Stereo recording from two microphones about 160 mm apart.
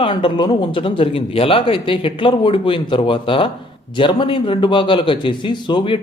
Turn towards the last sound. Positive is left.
turn(degrees=30)  # may be behind; listen again after turning